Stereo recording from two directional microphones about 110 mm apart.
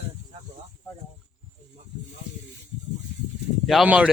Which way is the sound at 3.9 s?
10° right (ahead or behind).